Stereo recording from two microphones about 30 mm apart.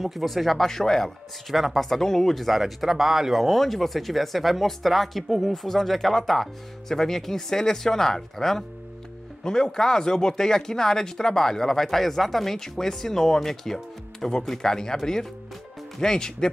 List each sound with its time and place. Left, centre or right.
0.0 s speech: centre
0.7 s speech: centre
1.5 s speech: centre
1.9 s speech: centre
2.6 s speech: centre
3.4 s speech: centre
12.5 s speech: centre
16.0 s speech: left